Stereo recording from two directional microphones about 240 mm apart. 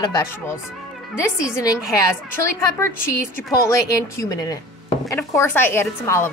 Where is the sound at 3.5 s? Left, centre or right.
Centre.